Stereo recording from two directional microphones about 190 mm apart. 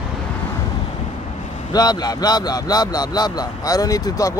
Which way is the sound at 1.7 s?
20° left (ahead or behind).